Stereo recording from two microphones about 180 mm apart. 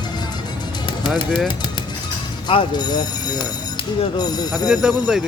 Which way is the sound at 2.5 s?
25° left (ahead or behind).